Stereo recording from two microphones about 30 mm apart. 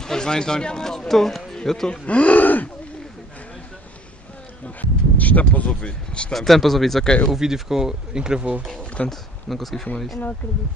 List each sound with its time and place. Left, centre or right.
0.0 s speech: left
2.0 s speech: left
2.4 s a sound: left
4.6 s speech: left
5.7 s speech: left
6.3 s speech: centre
7.3 s speech: centre
9.0 s speech: left
9.5 s speech: centre